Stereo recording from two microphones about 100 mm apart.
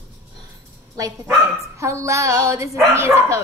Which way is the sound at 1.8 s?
30° right (ahead or behind).